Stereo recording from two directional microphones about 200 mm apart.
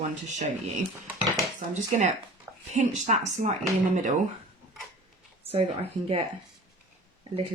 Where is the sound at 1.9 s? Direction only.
35° right (ahead or behind).